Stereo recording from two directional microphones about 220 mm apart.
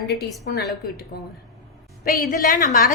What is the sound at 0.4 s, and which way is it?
Speech, 45° left (ahead or behind).